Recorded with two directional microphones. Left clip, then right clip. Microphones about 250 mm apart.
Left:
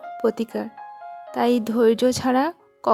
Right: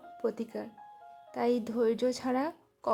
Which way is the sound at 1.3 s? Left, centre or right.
Left.